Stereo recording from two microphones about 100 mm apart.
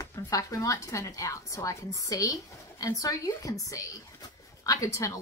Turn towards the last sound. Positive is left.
turn(degrees=35)  # may be behind; listen again after turning